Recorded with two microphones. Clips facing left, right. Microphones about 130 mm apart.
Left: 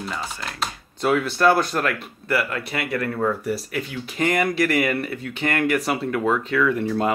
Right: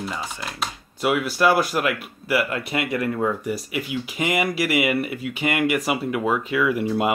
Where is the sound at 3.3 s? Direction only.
Centre (ahead or behind).